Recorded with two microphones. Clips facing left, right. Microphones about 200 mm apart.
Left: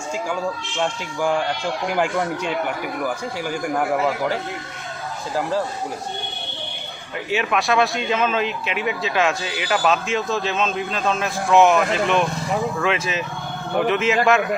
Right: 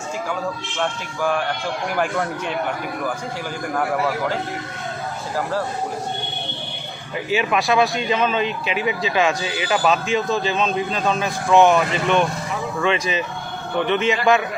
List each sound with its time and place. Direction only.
0.8 s speech: 15° left (ahead or behind)
3.8 s speech: 15° left (ahead or behind)
7.3 s a man's voice: centre (ahead or behind)